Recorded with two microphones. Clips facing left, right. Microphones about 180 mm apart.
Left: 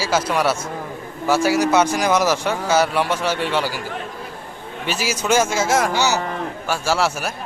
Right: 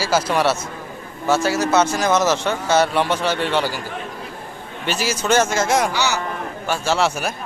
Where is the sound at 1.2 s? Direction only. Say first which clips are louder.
Left 1 dB; 10° left (ahead or behind).